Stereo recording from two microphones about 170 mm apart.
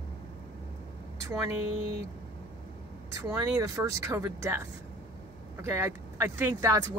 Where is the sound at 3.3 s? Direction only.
15° right (ahead or behind).